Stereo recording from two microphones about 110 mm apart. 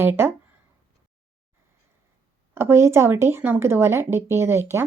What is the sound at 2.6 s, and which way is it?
Speech, 25° right (ahead or behind).